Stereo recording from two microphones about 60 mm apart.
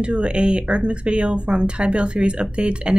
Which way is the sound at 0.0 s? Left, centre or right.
Centre.